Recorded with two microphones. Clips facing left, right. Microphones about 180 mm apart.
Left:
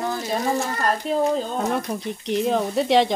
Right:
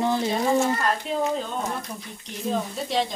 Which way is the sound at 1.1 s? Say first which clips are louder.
Left 4 dB; 40° left (ahead or behind).